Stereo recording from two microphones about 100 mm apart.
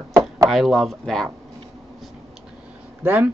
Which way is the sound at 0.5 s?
Centre (ahead or behind).